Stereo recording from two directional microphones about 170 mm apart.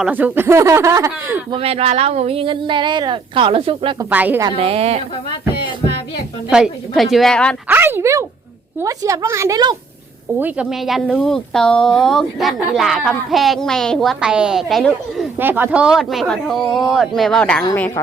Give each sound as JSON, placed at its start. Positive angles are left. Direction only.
{"t": 0.0, "sound": "speech", "side_deg": -10}
{"t": 1.5, "sound": "speech", "side_deg": -35}
{"t": 4.1, "sound": "speech", "side_deg": -10}
{"t": 4.4, "sound": "speech", "side_deg": -35}
{"t": 6.5, "sound": "speech", "side_deg": 0}
{"t": 7.7, "sound": "a woman's voice", "side_deg": -15}
{"t": 10.4, "sound": "speech", "side_deg": -5}
{"t": 15.4, "sound": "speech", "side_deg": -10}